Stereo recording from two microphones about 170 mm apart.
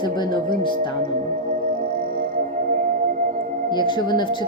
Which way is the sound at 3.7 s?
25° left (ahead or behind).